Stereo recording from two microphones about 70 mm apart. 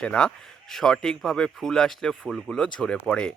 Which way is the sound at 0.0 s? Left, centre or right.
Centre.